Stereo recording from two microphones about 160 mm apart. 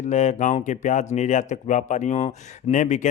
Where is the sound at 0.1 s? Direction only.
45° left (ahead or behind).